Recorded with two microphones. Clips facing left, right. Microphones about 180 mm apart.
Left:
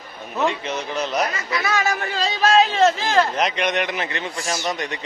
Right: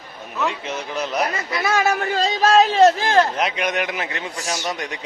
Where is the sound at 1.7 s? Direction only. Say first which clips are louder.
Right 5 dB; 45° right (ahead or behind).